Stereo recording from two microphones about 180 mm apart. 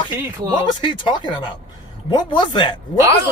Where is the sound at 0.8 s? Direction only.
25° left (ahead or behind).